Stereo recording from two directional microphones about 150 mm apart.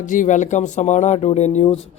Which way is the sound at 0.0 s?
60° left (ahead or behind).